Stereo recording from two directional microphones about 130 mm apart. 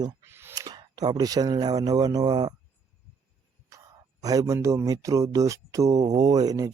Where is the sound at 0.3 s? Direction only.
20° right (ahead or behind).